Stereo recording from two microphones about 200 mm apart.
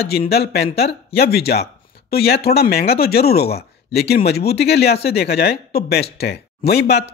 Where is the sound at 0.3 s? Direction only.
50° left (ahead or behind).